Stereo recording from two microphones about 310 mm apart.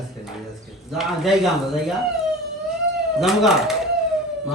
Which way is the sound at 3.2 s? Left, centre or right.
Centre.